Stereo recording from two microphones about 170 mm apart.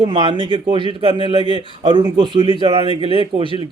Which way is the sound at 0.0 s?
30° right (ahead or behind).